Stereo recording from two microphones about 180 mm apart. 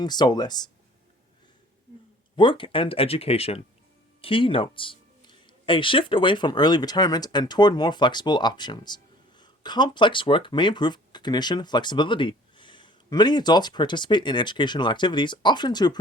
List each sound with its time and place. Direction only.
0.0 s speech: 25° left (ahead or behind)
2.3 s speech: 25° left (ahead or behind)